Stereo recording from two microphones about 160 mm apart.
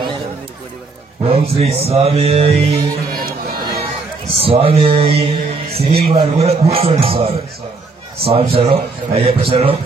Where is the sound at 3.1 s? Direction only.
65° right (ahead or behind).